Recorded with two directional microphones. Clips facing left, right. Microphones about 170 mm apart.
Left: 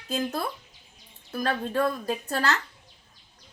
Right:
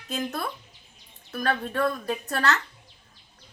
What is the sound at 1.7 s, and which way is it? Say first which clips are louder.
Speech: even; 15° left (ahead or behind).